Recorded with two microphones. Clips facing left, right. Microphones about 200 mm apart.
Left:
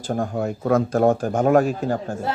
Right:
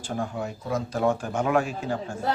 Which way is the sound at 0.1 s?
50° left (ahead or behind).